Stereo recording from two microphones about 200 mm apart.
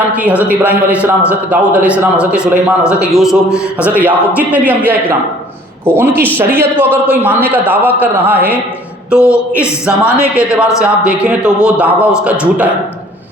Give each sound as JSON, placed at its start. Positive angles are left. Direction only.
{"t": 0.1, "sound": "a man's voice", "side_deg": -5}
{"t": 3.8, "sound": "speech", "side_deg": 10}
{"t": 4.0, "sound": "a man's voice", "side_deg": -10}